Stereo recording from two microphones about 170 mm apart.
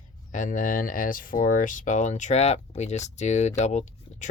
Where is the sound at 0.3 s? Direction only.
50° left (ahead or behind).